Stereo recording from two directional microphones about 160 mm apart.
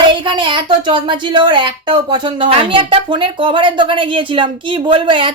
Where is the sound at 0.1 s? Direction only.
30° right (ahead or behind).